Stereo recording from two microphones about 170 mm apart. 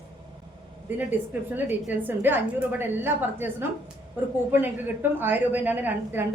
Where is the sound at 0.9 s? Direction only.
10° right (ahead or behind).